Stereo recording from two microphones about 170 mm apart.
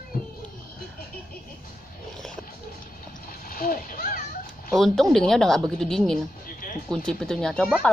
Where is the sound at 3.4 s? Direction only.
60° left (ahead or behind).